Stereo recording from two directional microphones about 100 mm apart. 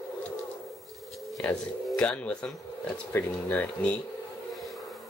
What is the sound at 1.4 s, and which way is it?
Speech, 10° left (ahead or behind).